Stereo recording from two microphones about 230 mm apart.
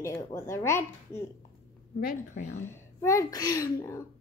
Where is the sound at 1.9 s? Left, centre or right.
Left.